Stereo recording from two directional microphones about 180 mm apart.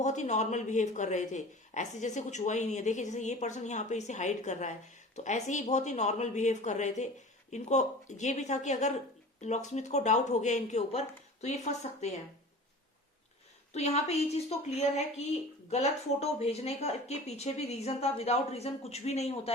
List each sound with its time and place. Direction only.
0.0 s a woman's voice: 40° left (ahead or behind)
13.7 s a woman's voice: 35° left (ahead or behind)